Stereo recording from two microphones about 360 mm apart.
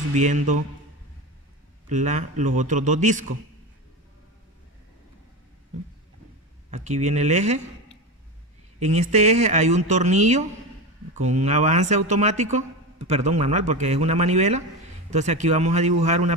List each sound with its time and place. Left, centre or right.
0.1 s speech: centre
1.9 s speech: centre
6.7 s speech: centre
8.7 s speech: centre